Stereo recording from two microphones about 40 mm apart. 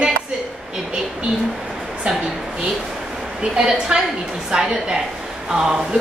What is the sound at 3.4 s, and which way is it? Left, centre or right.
A woman's voice, right.